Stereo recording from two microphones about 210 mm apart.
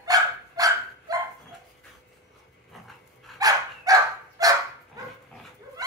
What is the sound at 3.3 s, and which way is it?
Dog, 15° right (ahead or behind).